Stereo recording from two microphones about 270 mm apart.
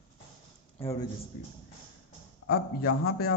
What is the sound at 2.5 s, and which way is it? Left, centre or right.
Speech, left.